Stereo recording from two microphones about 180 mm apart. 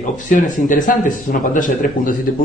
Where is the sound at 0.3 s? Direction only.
45° left (ahead or behind).